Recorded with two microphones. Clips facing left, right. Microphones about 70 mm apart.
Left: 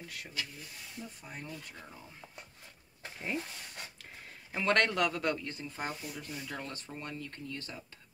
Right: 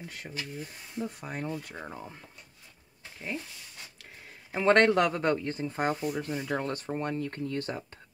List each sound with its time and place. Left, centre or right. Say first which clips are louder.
0.1 s speech: right 2 dB; right
1.0 s speech: right 12 dB; right
1.8 s speech: right 9 dB; right
4.5 s speech: right 7 dB; right